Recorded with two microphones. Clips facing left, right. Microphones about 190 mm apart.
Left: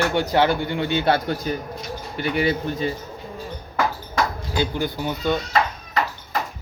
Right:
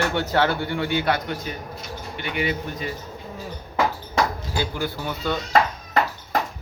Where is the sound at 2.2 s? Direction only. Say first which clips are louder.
Left 5 dB; 35° left (ahead or behind).